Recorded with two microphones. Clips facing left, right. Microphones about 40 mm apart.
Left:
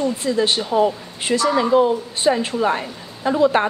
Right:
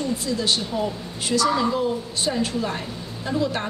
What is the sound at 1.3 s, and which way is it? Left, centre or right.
Speech, left.